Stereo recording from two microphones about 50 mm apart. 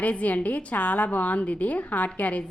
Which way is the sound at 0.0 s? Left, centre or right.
Left.